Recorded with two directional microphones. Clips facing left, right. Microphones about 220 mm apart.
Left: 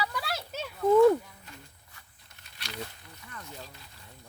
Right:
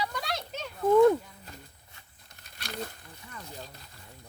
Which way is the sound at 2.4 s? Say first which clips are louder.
Right 3 dB; 45° right (ahead or behind).